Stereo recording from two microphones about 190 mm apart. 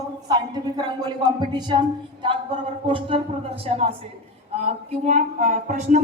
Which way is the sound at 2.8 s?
25° right (ahead or behind).